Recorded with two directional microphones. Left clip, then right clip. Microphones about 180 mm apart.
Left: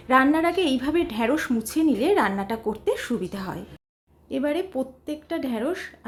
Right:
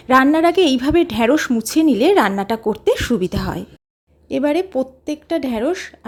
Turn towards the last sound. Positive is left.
turn(degrees=-35)  # may be behind; listen again after turning